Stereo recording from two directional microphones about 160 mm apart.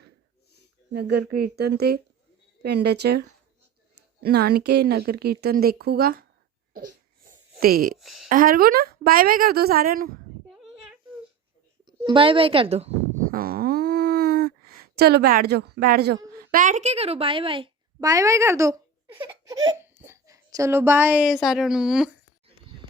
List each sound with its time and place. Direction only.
0.9 s a woman's voice: 90° right; by 6.2 s 70° right (ahead or behind)
7.6 s speech: 65° right (ahead or behind)
7.9 s speech: centre (ahead or behind)
8.3 s speech: 60° right (ahead or behind)
12.0 s a woman's voice: 35° right (ahead or behind)
13.3 s a sound: 70° right (ahead or behind); by 17.7 s 35° right (ahead or behind)
18.0 s speech: 20° right (ahead or behind); by 22.1 s 5° right (ahead or behind)